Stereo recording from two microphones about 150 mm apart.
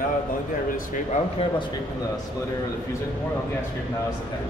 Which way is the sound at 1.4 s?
40° left (ahead or behind).